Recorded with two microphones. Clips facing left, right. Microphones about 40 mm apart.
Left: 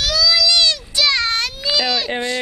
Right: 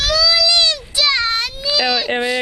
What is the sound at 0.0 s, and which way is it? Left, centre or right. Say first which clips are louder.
Child singing: right 1 dB; right.